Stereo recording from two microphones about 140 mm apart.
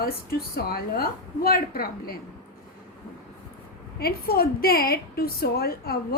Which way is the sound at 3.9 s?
90° left.